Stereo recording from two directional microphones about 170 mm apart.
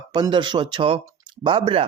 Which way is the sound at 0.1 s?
25° right (ahead or behind).